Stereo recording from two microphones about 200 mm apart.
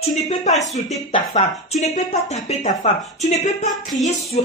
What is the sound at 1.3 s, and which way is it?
A man's voice, 35° left (ahead or behind).